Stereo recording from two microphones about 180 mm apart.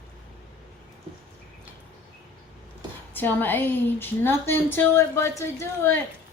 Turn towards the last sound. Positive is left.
turn(degrees=15)  # may be behind; listen again after turning